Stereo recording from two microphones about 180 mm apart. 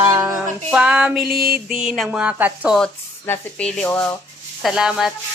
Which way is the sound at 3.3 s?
5° left (ahead or behind).